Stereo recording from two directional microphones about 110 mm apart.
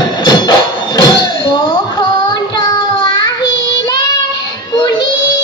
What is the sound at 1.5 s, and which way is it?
Child singing, 45° left (ahead or behind).